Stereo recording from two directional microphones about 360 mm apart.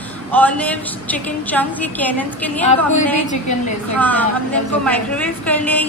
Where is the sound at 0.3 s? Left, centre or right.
Centre.